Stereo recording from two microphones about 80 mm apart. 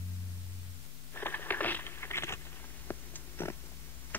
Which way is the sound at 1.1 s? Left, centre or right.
Left.